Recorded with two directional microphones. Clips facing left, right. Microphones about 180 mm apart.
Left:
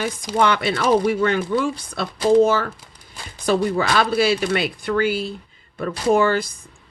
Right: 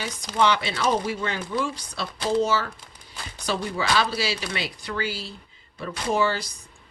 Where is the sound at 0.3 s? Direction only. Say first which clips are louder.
Left 3 dB; 55° left (ahead or behind).